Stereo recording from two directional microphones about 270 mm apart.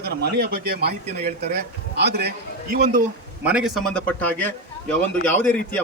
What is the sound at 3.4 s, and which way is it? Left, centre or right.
A man's voice, centre.